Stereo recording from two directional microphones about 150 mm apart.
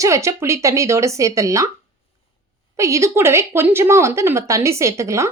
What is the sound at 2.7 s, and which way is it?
Speech, 20° right (ahead or behind).